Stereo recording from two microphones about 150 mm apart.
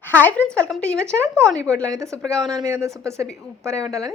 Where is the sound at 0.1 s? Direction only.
10° left (ahead or behind).